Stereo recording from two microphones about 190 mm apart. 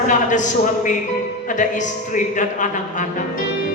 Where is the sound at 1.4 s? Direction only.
40° left (ahead or behind).